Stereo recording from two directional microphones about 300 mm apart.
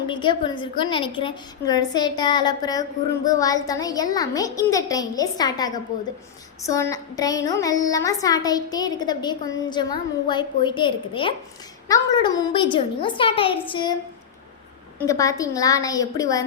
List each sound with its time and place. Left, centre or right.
0.1 s a woman's voice: centre
14.9 s a woman's voice: centre